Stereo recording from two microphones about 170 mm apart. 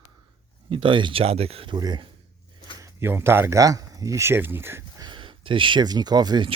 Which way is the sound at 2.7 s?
15° right (ahead or behind).